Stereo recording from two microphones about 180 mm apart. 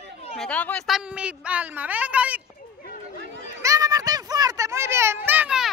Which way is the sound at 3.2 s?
85° right.